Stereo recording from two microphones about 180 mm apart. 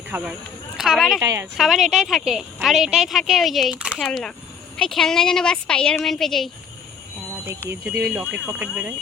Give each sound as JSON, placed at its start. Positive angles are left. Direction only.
{"t": 0.1, "sound": "a woman's voice", "side_deg": -10}
{"t": 1.2, "sound": "speech", "side_deg": -15}
{"t": 1.5, "sound": "a woman's voice", "side_deg": 0}
{"t": 7.4, "sound": "speech", "side_deg": -10}